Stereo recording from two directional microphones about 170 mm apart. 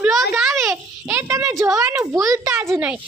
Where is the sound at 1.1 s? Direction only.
15° right (ahead or behind).